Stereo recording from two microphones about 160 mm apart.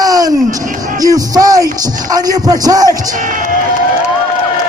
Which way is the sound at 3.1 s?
55° right (ahead or behind).